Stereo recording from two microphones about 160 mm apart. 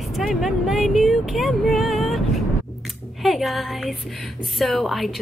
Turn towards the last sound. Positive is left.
turn(degrees=0)  # may be behind; listen again after turning